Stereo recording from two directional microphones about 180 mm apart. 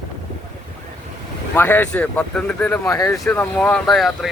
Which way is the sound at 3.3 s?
5° left (ahead or behind).